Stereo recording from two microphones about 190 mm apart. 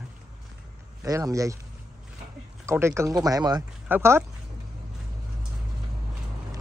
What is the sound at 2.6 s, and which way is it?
Speech, 15° right (ahead or behind).